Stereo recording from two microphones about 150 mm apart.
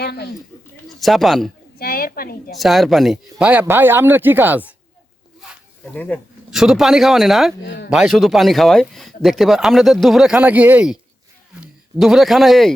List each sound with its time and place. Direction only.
0.0 s speech: 90° left
0.9 s speech: centre (ahead or behind)
1.8 s a sound: 80° left
2.5 s speech: centre (ahead or behind)
5.9 s speech: 10° left (ahead or behind)
6.5 s a man's voice: centre (ahead or behind)